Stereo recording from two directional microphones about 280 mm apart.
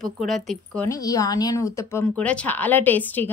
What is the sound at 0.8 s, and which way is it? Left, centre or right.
A woman's voice, centre.